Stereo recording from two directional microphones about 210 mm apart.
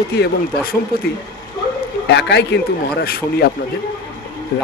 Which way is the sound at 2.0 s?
55° left (ahead or behind).